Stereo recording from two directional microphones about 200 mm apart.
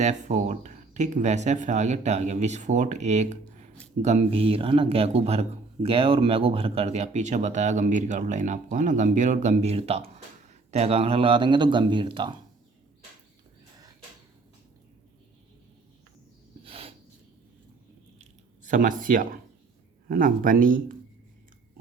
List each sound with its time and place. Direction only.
0.0 s speech: 35° right (ahead or behind)
16.6 s a sound: 30° right (ahead or behind)
18.2 s squish: 40° right (ahead or behind)
20.1 s speech: 45° right (ahead or behind)